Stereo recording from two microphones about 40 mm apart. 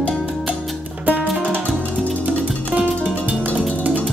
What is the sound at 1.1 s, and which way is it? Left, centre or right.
Music, right.